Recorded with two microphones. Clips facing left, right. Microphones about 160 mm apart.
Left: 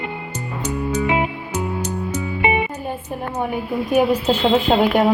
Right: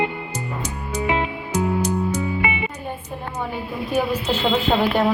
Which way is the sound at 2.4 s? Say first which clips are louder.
Left 6 dB; 25° left (ahead or behind).